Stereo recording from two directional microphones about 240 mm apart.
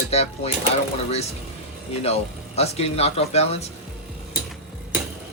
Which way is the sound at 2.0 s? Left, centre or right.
Left.